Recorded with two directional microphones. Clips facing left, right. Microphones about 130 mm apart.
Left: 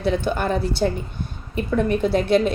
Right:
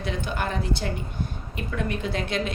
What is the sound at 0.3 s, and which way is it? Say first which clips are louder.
Speech: left 8 dB; 40° left (ahead or behind).